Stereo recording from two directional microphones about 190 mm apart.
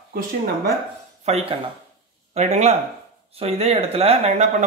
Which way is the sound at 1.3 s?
30° right (ahead or behind).